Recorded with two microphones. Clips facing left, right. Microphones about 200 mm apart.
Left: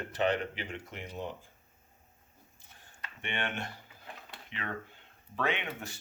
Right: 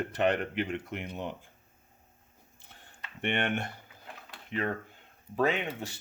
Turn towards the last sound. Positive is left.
turn(degrees=-40)  # may be behind; listen again after turning